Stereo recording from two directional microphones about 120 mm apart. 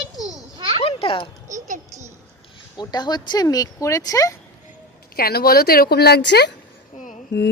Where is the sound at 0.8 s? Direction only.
50° left (ahead or behind).